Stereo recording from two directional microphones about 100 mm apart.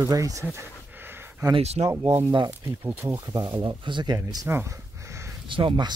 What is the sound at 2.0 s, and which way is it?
Speech, 55° right (ahead or behind).